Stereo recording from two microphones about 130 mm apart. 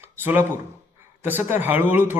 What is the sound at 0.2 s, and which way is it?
Speech, 15° right (ahead or behind).